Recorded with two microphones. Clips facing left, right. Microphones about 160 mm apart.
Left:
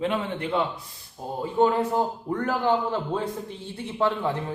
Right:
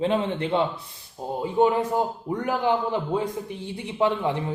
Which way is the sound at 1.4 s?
15° right (ahead or behind).